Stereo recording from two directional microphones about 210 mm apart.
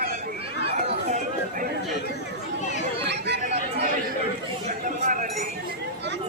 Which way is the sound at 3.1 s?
55° right (ahead or behind).